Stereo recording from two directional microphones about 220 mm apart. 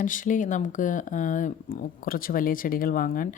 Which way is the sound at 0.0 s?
35° left (ahead or behind).